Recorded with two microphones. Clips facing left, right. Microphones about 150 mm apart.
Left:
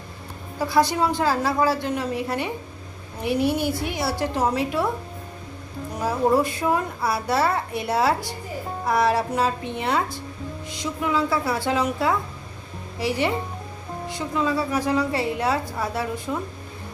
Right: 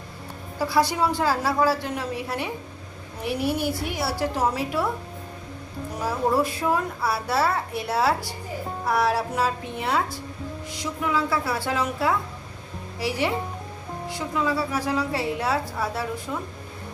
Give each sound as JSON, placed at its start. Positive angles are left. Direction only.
{"t": 0.6, "sound": "a woman's voice", "side_deg": -5}
{"t": 6.3, "sound": "a woman's voice", "side_deg": -5}